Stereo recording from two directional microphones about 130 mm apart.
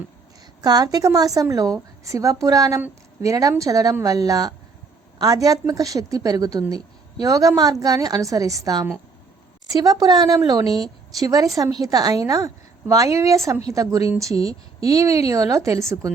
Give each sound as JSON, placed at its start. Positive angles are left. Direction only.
{"t": 0.6, "sound": "a woman's voice", "side_deg": -30}